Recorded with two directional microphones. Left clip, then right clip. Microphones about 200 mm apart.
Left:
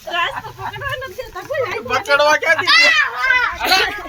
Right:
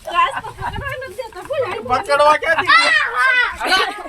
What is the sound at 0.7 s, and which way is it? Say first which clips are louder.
Speech: left 2 dB; 5° left (ahead or behind).